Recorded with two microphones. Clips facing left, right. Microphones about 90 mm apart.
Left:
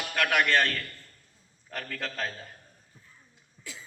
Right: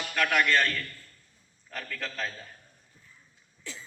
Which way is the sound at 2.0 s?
50° left (ahead or behind).